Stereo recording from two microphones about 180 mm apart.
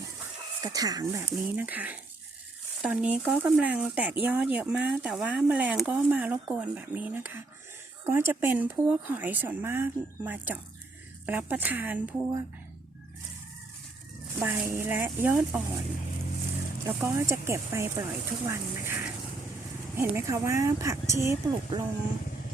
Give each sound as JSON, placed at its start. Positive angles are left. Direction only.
{"t": 0.6, "sound": "speech", "side_deg": -20}
{"t": 14.4, "sound": "speech", "side_deg": -10}
{"t": 17.0, "sound": "speech", "side_deg": -15}
{"t": 20.0, "sound": "speech", "side_deg": -15}